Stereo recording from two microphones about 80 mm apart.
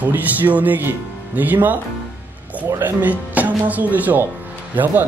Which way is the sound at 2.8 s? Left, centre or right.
Right.